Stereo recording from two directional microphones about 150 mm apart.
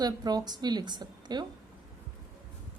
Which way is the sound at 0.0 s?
25° right (ahead or behind).